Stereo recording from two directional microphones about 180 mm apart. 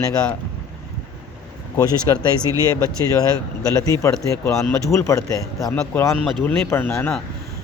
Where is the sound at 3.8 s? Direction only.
15° left (ahead or behind).